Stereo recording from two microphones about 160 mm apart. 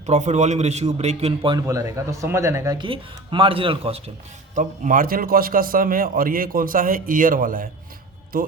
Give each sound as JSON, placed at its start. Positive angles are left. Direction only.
{"t": 0.0, "sound": "a man's voice", "side_deg": -45}
{"t": 1.6, "sound": "speech", "side_deg": -20}
{"t": 2.7, "sound": "speech", "side_deg": -30}
{"t": 4.5, "sound": "a man's voice", "side_deg": -55}